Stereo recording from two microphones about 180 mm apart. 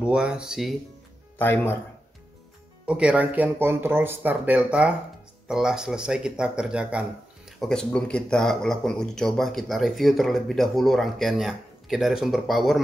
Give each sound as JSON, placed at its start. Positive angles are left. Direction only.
{"t": 0.0, "sound": "speech", "side_deg": -5}
{"t": 1.4, "sound": "speech", "side_deg": 10}
{"t": 2.9, "sound": "speech", "side_deg": -5}